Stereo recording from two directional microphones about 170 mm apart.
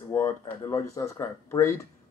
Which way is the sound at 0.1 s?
15° left (ahead or behind).